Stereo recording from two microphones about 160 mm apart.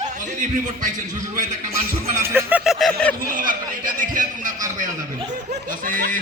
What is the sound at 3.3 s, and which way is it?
Chuckle, 60° right (ahead or behind).